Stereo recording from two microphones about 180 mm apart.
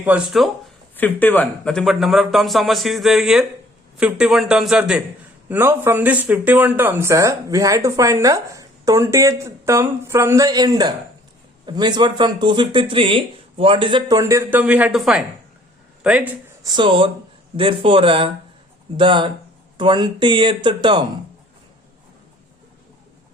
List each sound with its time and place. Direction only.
0.0 s a man's voice: 5° right (ahead or behind)
0.9 s a man's voice: 10° left (ahead or behind); by 16.3 s 10° right (ahead or behind)
16.6 s speech: 25° right (ahead or behind)